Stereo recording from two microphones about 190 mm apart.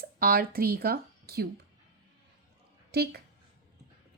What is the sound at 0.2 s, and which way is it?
Speech, 50° right (ahead or behind).